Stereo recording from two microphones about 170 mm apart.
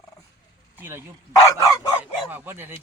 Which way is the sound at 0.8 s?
15° right (ahead or behind).